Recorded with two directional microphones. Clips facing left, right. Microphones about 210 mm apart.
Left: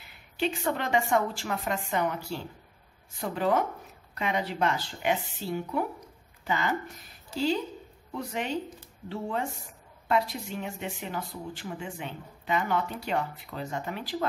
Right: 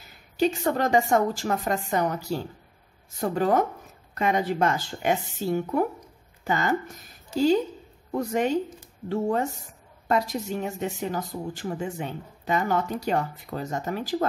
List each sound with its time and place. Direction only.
0.0 s speech: 40° right (ahead or behind)
8.1 s speech: 45° right (ahead or behind)